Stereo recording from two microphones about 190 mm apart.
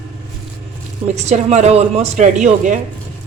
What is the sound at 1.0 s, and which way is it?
A woman's voice, 35° right (ahead or behind).